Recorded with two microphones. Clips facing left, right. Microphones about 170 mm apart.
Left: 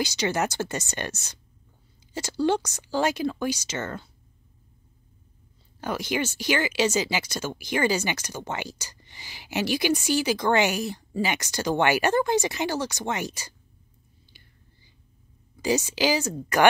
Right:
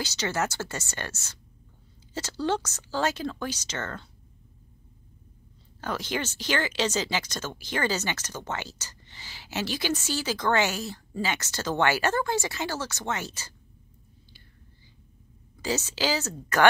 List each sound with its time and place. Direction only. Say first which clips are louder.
0.0 s speech: left 3 dB; 15° left (ahead or behind)
5.8 s speech: left 3 dB; 10° left (ahead or behind)
15.6 s speech: left 5 dB; 15° left (ahead or behind)